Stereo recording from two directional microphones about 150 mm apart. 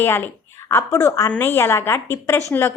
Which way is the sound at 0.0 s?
15° left (ahead or behind).